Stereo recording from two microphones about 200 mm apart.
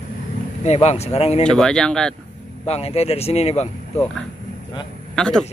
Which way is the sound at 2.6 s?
30° left (ahead or behind).